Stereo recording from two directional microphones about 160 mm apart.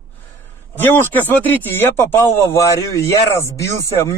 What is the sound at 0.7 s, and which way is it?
Speech, 10° left (ahead or behind).